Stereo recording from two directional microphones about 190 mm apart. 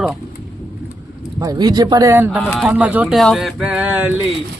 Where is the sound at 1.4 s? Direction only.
20° right (ahead or behind).